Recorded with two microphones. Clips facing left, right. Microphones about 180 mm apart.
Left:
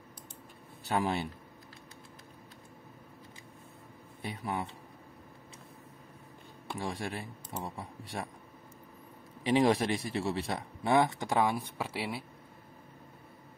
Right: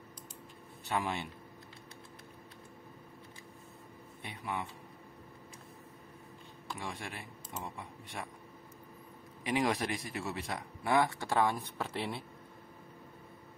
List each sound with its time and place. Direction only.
0.8 s speech: 35° left (ahead or behind)
4.2 s speech: 35° left (ahead or behind)
6.8 s speech: 35° left (ahead or behind)
9.4 s a man's voice: 30° left (ahead or behind); by 12.3 s 5° left (ahead or behind)